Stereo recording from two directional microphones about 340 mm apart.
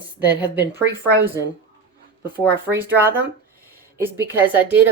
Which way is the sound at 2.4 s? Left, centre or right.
Centre.